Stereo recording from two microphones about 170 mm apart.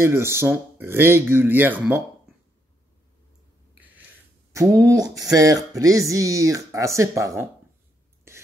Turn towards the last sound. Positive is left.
turn(degrees=-20)  # may be behind; listen again after turning